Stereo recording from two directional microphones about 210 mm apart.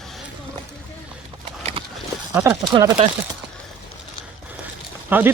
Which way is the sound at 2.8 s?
25° right (ahead or behind).